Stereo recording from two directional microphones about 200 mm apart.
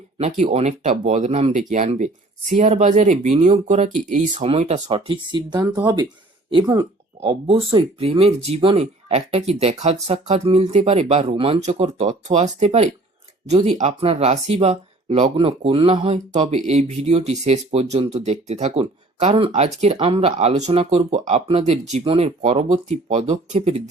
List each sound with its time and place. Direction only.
0.2 s speech: 35° right (ahead or behind)
4.9 s speech: 25° right (ahead or behind)